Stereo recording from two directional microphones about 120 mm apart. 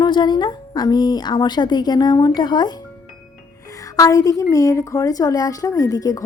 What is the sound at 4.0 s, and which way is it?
A woman's voice, 30° left (ahead or behind).